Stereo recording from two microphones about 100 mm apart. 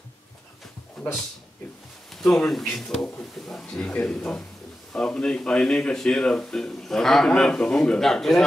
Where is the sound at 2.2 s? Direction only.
5° left (ahead or behind).